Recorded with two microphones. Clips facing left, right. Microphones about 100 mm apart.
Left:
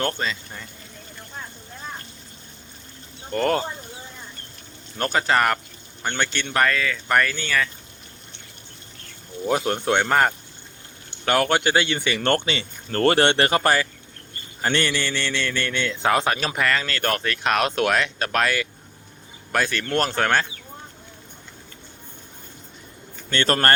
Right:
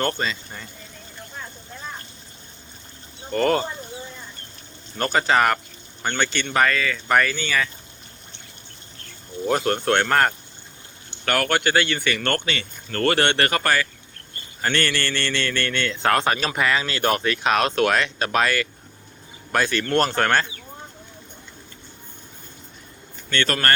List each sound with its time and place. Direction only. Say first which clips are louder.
0.0 s speech: right 1 dB; centre (ahead or behind)
3.3 s speech: right 1 dB; centre (ahead or behind)
4.9 s speech: right 1 dB; centre (ahead or behind)
9.5 s a man's voice: right 1 dB; 10° left (ahead or behind)
11.3 s a man's voice: left 1 dB; 20° left (ahead or behind); by 20.5 s centre (ahead or behind)
23.3 s speech: left 2 dB; 30° left (ahead or behind)